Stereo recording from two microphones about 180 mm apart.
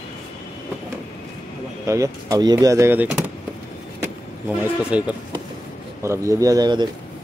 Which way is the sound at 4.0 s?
5° right (ahead or behind).